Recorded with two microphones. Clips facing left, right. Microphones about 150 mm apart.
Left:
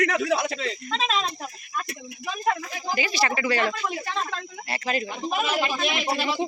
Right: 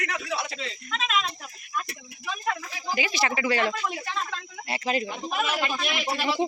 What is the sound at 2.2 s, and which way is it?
Speech, 45° left (ahead or behind).